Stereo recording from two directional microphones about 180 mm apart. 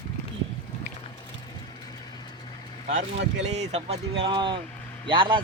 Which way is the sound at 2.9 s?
40° right (ahead or behind).